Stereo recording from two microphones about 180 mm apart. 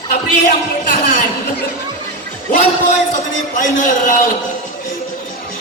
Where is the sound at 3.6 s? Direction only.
45° left (ahead or behind).